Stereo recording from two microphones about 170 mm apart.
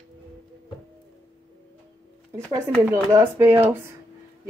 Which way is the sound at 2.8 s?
15° right (ahead or behind).